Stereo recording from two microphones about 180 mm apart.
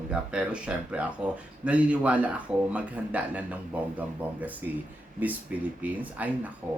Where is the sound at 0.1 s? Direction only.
5° right (ahead or behind).